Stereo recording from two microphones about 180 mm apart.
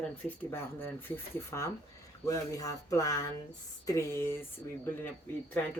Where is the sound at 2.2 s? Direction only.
20° left (ahead or behind).